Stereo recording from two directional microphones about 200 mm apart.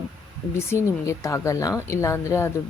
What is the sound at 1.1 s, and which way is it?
Speech, 15° left (ahead or behind).